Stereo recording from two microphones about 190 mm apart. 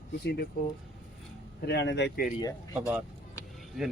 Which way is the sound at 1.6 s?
60° left (ahead or behind).